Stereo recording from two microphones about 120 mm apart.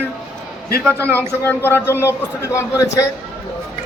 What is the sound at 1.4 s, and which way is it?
A man's voice, 20° left (ahead or behind).